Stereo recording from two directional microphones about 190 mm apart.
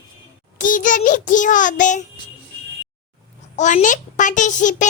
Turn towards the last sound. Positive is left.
turn(degrees=40)  # may be behind; listen again after turning